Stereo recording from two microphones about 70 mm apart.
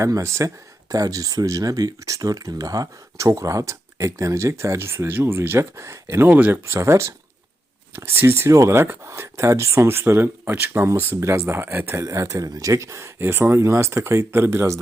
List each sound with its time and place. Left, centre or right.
0.0 s speech: right
6.2 s speech: right
6.7 s speech: right
8.4 s speech: right
11.2 s speech: right
11.9 s speech: right
13.1 s speech: right